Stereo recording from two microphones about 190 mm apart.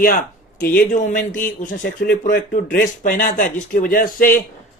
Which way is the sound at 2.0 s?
60° left (ahead or behind).